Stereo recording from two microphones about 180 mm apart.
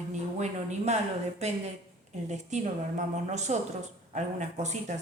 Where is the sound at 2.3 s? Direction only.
40° right (ahead or behind).